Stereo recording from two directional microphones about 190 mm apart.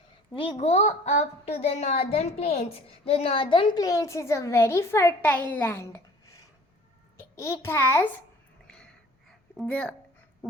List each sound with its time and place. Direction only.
0.3 s a woman's voice: 35° left (ahead or behind); by 8.0 s 15° left (ahead or behind)
8.6 s a sound: 5° left (ahead or behind)
9.6 s a woman's voice: 5° left (ahead or behind)